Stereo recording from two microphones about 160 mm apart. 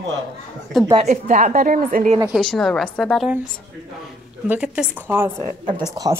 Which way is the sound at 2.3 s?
5° left (ahead or behind).